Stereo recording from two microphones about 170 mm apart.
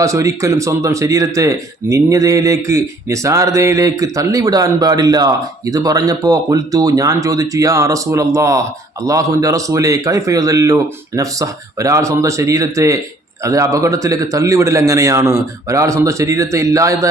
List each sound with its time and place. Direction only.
0.0 s a man's voice: 15° right (ahead or behind)